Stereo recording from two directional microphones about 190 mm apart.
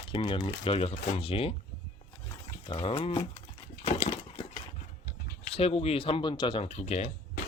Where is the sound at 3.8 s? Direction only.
35° left (ahead or behind).